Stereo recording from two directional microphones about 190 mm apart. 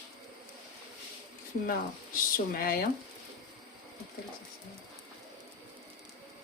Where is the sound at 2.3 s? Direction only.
50° left (ahead or behind).